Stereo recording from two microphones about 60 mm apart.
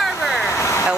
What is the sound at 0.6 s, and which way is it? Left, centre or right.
Vehicle, left.